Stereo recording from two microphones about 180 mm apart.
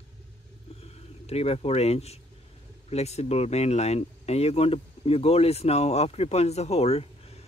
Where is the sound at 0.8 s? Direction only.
35° left (ahead or behind).